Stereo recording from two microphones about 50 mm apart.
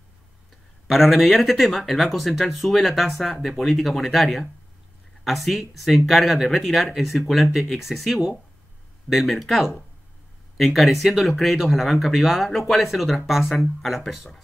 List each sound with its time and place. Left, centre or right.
0.8 s speech: centre